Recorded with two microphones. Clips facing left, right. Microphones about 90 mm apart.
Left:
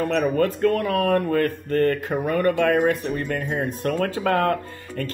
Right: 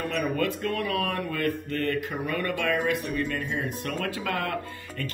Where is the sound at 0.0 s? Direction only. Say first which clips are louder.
Left 7 dB; 40° left (ahead or behind).